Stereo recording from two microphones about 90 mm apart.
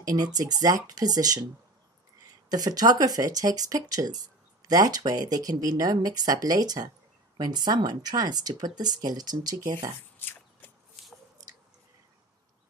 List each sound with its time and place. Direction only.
0.1 s speech: 45° right (ahead or behind)
2.5 s speech: 45° right (ahead or behind)
10.1 s a sound: 25° left (ahead or behind)